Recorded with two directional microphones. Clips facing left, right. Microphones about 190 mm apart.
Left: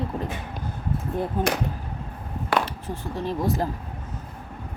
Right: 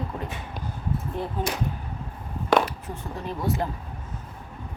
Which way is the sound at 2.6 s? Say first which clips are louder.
Left 1 dB; 30° left (ahead or behind).